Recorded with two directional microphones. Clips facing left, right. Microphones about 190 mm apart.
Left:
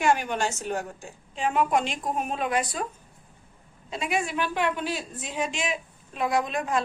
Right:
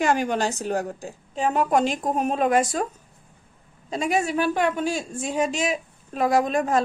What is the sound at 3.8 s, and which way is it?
Speech, 40° right (ahead or behind).